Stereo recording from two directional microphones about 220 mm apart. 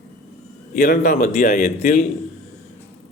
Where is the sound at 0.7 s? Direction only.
40° left (ahead or behind).